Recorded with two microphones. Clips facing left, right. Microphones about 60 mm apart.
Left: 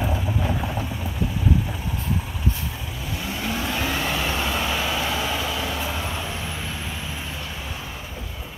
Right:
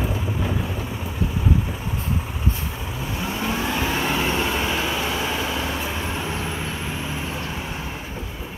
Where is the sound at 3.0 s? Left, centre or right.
Right.